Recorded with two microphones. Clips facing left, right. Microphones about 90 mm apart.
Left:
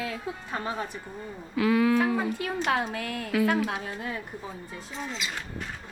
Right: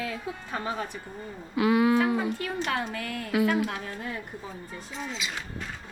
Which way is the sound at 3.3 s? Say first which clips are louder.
Even; 15° right (ahead or behind).